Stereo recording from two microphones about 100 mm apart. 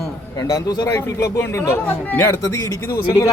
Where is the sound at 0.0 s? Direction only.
35° left (ahead or behind).